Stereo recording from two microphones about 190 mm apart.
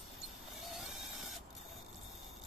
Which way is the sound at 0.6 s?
Centre (ahead or behind).